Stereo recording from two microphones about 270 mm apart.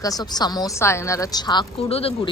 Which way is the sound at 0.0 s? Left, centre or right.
Centre.